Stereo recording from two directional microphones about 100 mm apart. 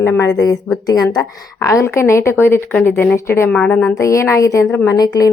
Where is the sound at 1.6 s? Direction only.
30° left (ahead or behind).